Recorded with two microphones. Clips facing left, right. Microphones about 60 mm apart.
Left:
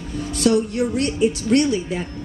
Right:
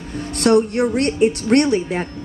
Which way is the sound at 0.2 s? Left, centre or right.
Right.